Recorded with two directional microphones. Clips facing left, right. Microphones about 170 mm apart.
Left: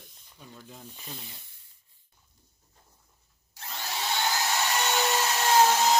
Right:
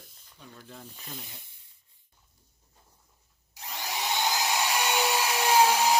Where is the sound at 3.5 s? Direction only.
15° right (ahead or behind).